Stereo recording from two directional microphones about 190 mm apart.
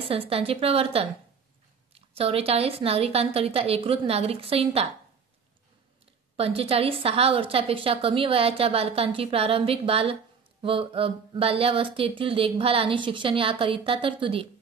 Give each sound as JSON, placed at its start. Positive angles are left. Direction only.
{"t": 0.0, "sound": "a woman's voice", "side_deg": -30}
{"t": 6.3, "sound": "speech", "side_deg": -30}